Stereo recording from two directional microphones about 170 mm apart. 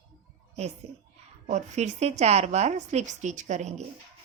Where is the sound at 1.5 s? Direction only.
45° right (ahead or behind).